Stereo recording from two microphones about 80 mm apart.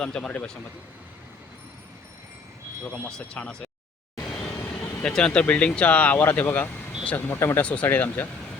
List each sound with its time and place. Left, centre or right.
0.0 s speech: centre
2.8 s speech: centre
4.2 s vehicle: centre
4.8 s vehicle: left
5.1 s speech: centre
7.3 s speech: left
7.6 s speech: centre